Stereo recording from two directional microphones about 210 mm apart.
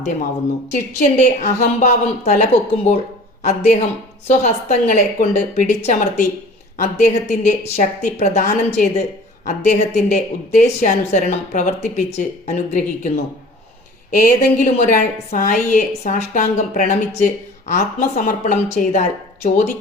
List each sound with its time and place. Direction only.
0.7 s a woman's voice: 35° left (ahead or behind)